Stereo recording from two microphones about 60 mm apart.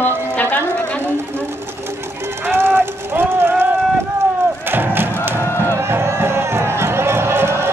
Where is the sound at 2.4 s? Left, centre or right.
Right.